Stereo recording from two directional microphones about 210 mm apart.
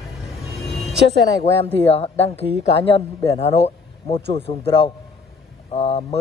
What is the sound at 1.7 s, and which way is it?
A man's voice, 30° left (ahead or behind).